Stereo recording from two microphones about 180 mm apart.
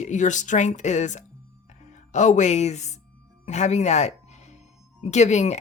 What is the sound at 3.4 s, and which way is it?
Music, 40° left (ahead or behind).